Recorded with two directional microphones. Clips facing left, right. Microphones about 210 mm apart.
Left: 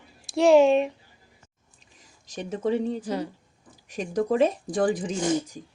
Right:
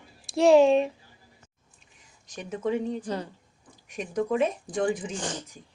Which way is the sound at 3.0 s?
10° left (ahead or behind).